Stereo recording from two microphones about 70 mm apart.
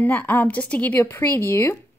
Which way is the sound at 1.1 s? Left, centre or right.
Left.